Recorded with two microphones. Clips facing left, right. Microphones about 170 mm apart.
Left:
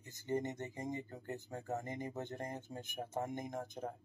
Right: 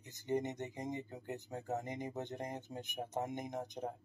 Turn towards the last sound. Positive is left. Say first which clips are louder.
# right 1 dB
turn(degrees=-15)  # may be behind; listen again after turning